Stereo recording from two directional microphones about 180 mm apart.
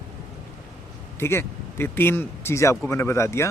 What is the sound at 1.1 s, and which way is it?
Speech, 15° left (ahead or behind).